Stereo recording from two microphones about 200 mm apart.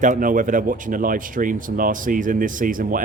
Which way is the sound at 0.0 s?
40° right (ahead or behind).